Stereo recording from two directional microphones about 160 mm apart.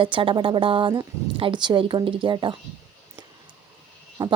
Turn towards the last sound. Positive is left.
turn(degrees=-25)  # may be behind; listen again after turning